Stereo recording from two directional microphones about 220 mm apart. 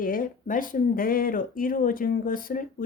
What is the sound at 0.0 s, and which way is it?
A woman's voice, 40° left (ahead or behind).